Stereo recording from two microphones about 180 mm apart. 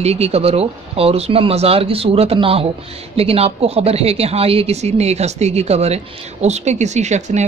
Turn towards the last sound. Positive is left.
turn(degrees=-40)  # may be behind; listen again after turning